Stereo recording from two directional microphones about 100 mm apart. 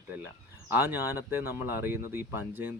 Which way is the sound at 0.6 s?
20° right (ahead or behind).